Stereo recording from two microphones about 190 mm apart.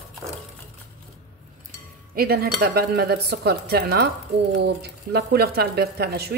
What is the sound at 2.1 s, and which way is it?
A woman's voice, 55° right (ahead or behind).